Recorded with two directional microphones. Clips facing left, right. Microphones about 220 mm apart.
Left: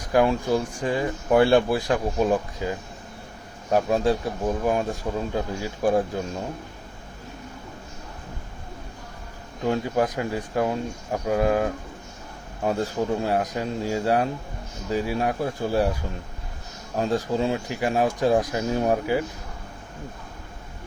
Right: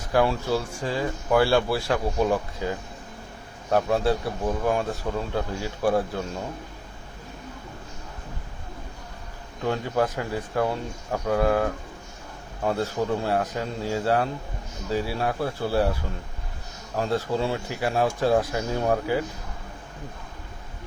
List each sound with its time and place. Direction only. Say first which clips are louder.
0.1 s speech: left 2 dB; 15° left (ahead or behind)
3.7 s speech: left 1 dB; 15° left (ahead or behind)
9.6 s speech: left 2 dB; 15° left (ahead or behind)
17.0 s speech: left 2 dB; 15° left (ahead or behind)